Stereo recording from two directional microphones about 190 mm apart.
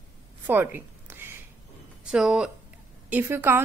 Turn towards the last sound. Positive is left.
turn(degrees=-15)  # may be behind; listen again after turning